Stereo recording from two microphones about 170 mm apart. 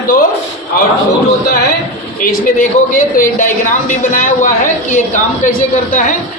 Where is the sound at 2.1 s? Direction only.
50° left (ahead or behind).